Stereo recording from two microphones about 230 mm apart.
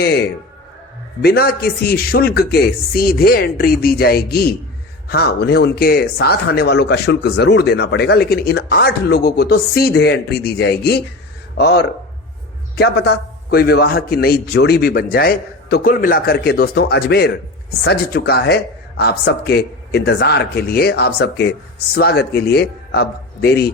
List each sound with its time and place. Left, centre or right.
0.0 s speech: left